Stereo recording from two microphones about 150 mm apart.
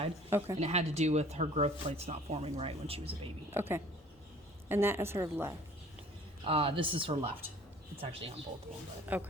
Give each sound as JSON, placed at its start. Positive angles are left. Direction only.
{"t": 0.3, "sound": "speech", "side_deg": -15}
{"t": 0.6, "sound": "speech", "side_deg": -45}
{"t": 3.5, "sound": "a woman's voice", "side_deg": -15}
{"t": 6.4, "sound": "speech", "side_deg": -40}
{"t": 9.1, "sound": "a woman's voice", "side_deg": -10}